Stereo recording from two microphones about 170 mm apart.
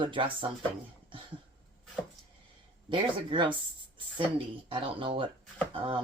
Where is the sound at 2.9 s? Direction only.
30° right (ahead or behind).